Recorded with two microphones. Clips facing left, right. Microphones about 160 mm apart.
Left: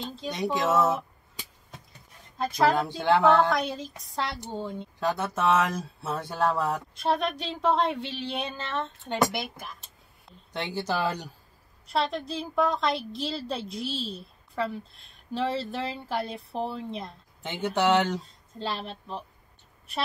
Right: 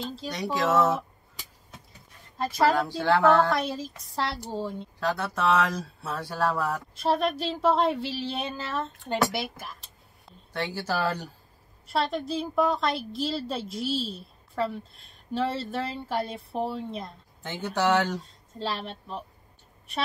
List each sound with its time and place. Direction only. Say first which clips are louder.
0.0 s a woman's voice: right 1 dB; centre (ahead or behind)
0.3 s speech: left 1 dB; 20° left (ahead or behind)
0.7 s a woman's voice: right 1 dB; centre (ahead or behind)
1.7 s a sound: left 1 dB; 5° right (ahead or behind)
3.0 s speech: even; 20° left (ahead or behind)
3.3 s a woman's voice: even; centre (ahead or behind)
5.0 s speech: even; 20° left (ahead or behind)
7.0 s a woman's voice: right 3 dB; centre (ahead or behind)
10.5 s speech: even; 20° left (ahead or behind)
11.9 s a woman's voice: right 1 dB; centre (ahead or behind)
17.4 s speech: left 1 dB; 20° left (ahead or behind)
18.6 s a woman's voice: right 1 dB; centre (ahead or behind)